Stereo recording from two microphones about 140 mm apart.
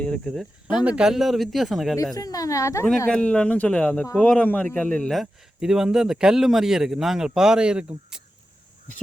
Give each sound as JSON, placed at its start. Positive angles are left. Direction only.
{"t": 0.0, "sound": "a man's voice", "side_deg": 5}
{"t": 2.1, "sound": "speech", "side_deg": 25}
{"t": 3.1, "sound": "a man's voice", "side_deg": 5}